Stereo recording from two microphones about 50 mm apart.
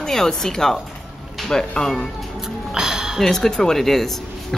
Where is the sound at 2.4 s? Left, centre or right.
Centre.